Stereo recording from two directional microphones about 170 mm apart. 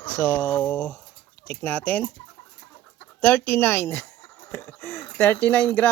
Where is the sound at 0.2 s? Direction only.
10° left (ahead or behind).